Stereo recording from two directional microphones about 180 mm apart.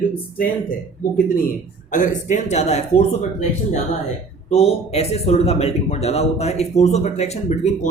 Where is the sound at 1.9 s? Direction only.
45° left (ahead or behind).